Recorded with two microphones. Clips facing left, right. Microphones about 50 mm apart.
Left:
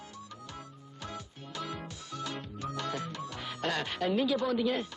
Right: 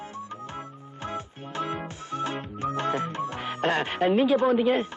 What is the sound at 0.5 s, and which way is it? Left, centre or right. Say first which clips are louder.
Music: right 8 dB; right.